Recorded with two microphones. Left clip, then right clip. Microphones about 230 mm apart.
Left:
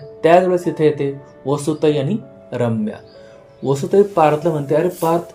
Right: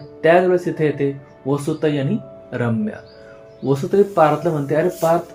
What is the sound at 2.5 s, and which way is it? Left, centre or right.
Speech, centre.